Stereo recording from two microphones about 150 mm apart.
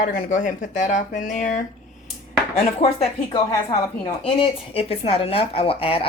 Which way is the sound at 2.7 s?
45° left (ahead or behind).